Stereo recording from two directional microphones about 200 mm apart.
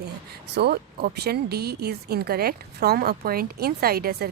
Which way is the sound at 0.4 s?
55° right (ahead or behind).